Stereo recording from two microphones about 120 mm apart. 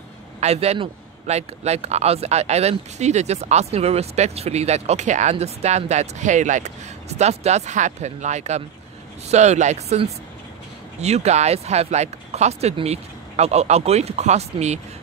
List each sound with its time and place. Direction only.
0.4 s a man's voice: 65° right (ahead or behind)